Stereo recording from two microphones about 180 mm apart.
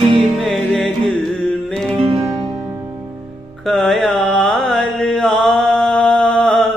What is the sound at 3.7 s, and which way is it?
Mantra, centre (ahead or behind).